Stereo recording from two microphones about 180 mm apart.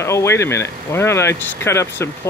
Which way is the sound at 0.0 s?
15° left (ahead or behind).